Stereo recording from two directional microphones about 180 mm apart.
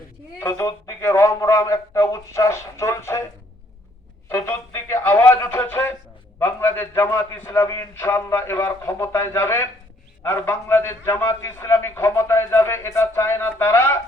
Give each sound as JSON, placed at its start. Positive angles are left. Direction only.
{"t": 0.3, "sound": "a man's voice", "side_deg": 15}
{"t": 4.3, "sound": "a man's voice", "side_deg": 15}